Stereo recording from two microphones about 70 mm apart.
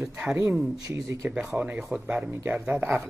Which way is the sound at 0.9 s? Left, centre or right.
Right.